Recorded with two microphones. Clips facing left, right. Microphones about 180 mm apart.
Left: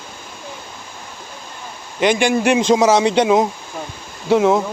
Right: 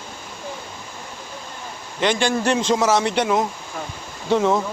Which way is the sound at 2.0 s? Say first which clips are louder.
Left 4 dB; 15° left (ahead or behind).